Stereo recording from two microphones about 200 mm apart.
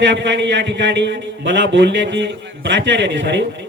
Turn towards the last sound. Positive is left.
turn(degrees=-65)  # may be behind; listen again after turning